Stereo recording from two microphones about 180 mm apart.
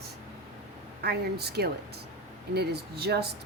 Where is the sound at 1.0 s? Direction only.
65° right (ahead or behind).